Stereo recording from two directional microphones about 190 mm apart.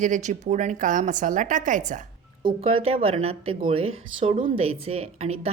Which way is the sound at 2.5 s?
30° right (ahead or behind).